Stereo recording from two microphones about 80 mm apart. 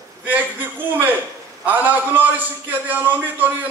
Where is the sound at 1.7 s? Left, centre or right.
Right.